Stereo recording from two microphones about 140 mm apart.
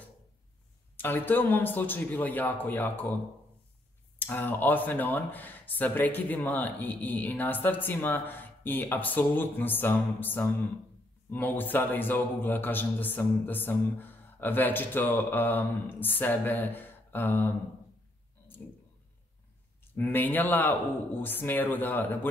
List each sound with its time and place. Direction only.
0.9 s a man's voice: 15° left (ahead or behind)
4.2 s a man's voice: 15° left (ahead or behind)
19.9 s a man's voice: 15° left (ahead or behind)